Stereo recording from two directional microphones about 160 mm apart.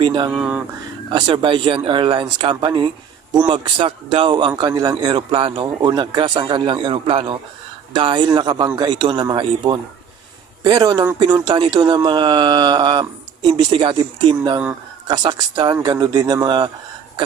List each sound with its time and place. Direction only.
0.0 s a man's voice: 30° right (ahead or behind)
0.3 s speech: 10° right (ahead or behind)
1.1 s a man's voice: 30° right (ahead or behind)